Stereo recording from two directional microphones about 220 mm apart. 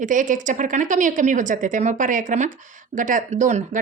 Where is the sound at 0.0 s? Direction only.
35° right (ahead or behind).